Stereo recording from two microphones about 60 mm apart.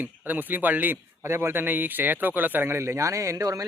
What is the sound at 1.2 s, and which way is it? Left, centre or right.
Speech, right.